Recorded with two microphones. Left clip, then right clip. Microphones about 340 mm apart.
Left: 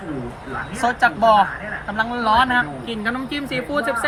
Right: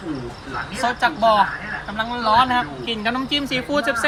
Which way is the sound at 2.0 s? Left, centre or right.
Centre.